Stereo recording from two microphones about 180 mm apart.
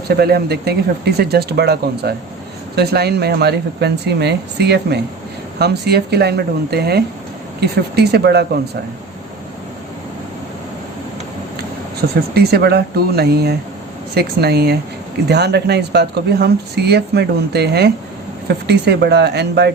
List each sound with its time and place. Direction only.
0.1 s speech: 60° right (ahead or behind)
12.3 s speech: 60° right (ahead or behind)